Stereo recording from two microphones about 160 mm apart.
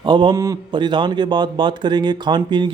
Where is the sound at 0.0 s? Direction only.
30° right (ahead or behind).